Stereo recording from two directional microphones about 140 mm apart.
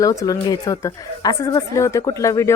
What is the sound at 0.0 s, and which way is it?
A woman's voice, 25° left (ahead or behind).